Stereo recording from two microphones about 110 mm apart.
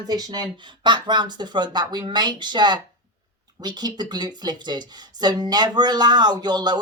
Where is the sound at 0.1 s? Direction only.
35° right (ahead or behind).